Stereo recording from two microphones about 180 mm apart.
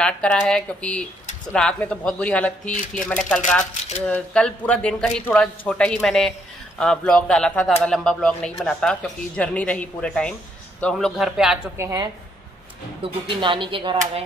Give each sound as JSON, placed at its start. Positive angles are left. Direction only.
{"t": 0.0, "sound": "speech", "side_deg": 5}
{"t": 11.7, "sound": "a woman's voice", "side_deg": -15}
{"t": 13.0, "sound": "speech", "side_deg": -25}